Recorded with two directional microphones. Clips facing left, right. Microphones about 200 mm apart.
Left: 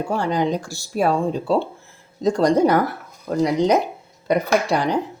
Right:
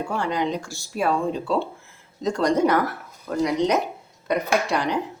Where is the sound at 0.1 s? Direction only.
35° left (ahead or behind).